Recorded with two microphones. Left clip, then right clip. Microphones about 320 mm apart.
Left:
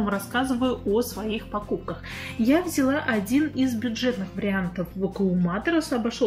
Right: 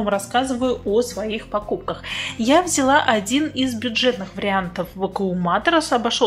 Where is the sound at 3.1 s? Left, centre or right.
Right.